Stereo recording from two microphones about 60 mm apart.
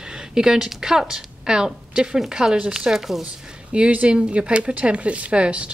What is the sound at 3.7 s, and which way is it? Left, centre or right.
Speech, right.